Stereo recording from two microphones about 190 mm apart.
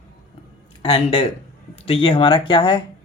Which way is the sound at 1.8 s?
25° left (ahead or behind).